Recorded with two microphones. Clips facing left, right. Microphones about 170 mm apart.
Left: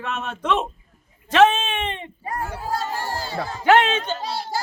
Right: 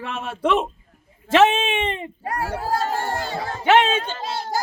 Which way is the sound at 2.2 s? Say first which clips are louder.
Right 2 dB; 75° right (ahead or behind).